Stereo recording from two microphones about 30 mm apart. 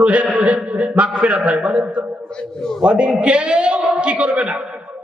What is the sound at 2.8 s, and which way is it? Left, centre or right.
A man's voice, right.